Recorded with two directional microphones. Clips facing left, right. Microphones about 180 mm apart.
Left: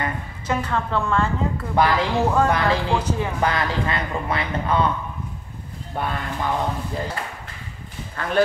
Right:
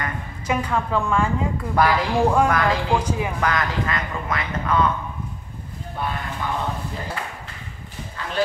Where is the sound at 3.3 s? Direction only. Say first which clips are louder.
Left 1 dB; 30° left (ahead or behind).